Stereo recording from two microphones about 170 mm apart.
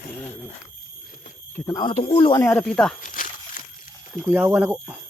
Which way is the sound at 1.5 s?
20° left (ahead or behind).